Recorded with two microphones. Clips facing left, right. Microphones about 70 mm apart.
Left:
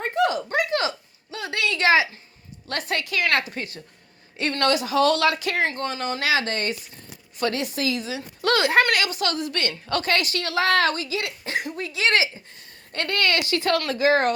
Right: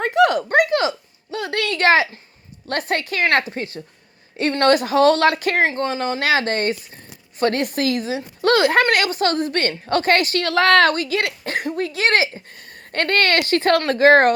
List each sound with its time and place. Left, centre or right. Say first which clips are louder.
0.0 s a sound: right 6 dB; right
0.7 s a sound: right 5 dB; right
2.6 s speech: right 5 dB; right
4.7 s speech: right 6 dB; right
5.6 s a woman's voice: right 5 dB; right
8.1 s a woman's voice: right 6 dB; right